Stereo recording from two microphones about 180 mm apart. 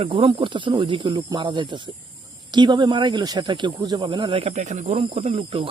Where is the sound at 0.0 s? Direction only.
30° right (ahead or behind).